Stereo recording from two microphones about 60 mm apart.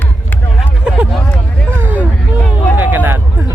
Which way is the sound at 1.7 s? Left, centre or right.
Right.